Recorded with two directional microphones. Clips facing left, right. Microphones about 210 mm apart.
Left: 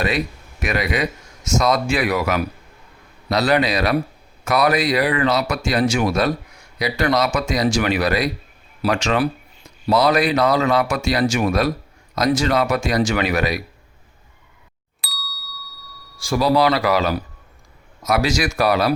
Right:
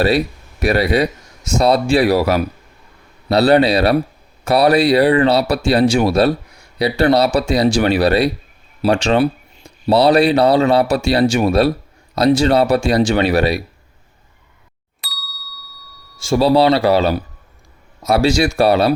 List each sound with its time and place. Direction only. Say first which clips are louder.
0.6 s speech: right 7 dB; 35° right (ahead or behind)
15.0 s ding: left 1 dB; centre (ahead or behind)
16.1 s speech: right 4 dB; 25° right (ahead or behind)